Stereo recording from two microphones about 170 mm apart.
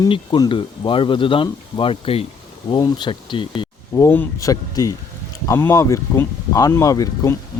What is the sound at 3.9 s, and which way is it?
Speech, 15° left (ahead or behind).